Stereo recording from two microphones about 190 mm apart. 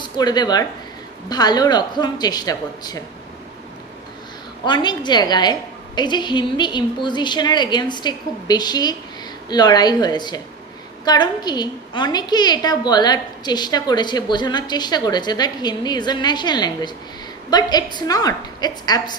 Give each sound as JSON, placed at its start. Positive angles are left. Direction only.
{"t": 0.0, "sound": "a woman's voice", "side_deg": 20}
{"t": 4.6, "sound": "a woman's voice", "side_deg": 25}